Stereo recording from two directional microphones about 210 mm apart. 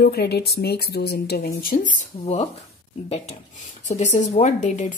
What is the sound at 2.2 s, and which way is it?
Speech, 30° left (ahead or behind).